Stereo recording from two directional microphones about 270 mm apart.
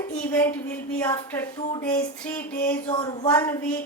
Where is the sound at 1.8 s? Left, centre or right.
Centre.